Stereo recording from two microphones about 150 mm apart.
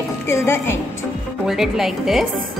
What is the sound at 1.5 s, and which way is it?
Speech, centre (ahead or behind).